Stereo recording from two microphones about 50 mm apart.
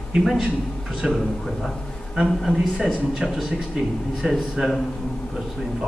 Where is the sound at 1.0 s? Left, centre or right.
Centre.